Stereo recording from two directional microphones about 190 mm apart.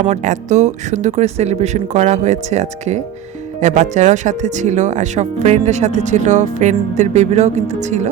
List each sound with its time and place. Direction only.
0.0 s speech: 40° right (ahead or behind)